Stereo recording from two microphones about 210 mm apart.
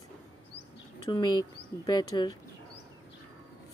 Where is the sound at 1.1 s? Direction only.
20° left (ahead or behind).